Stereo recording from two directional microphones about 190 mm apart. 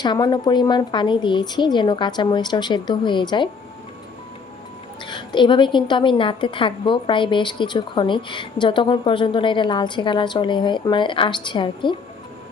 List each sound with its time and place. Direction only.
0.0 s a woman's voice: 20° left (ahead or behind)
5.0 s a woman's voice: 25° left (ahead or behind)